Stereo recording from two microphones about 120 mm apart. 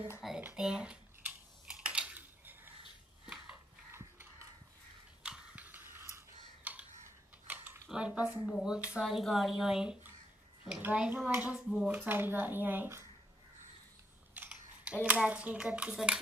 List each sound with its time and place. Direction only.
0.4 s typing: 10° right (ahead or behind)
5.2 s a sound: 10° right (ahead or behind)
8.5 s speech: centre (ahead or behind)
14.3 s mechanisms: 10° right (ahead or behind)
15.0 s speech: 10° right (ahead or behind)